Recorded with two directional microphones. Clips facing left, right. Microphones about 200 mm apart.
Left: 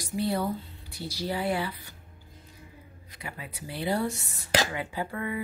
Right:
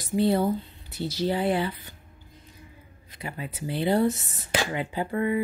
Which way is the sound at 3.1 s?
25° right (ahead or behind).